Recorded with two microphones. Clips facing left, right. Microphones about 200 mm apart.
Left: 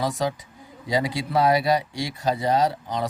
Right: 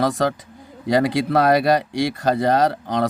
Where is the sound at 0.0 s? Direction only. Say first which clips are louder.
Right 5 dB; 70° right (ahead or behind).